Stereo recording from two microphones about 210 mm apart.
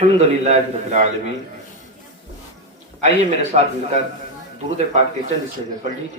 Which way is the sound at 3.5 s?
35° right (ahead or behind).